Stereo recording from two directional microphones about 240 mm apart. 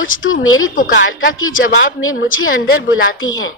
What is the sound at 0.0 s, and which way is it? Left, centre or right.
Speech, left.